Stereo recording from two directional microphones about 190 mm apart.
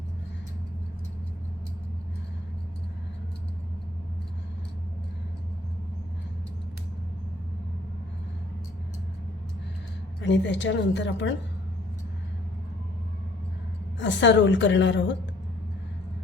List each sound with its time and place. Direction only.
10.2 s a woman's voice: 70° left (ahead or behind)
14.0 s a woman's voice: 70° left (ahead or behind)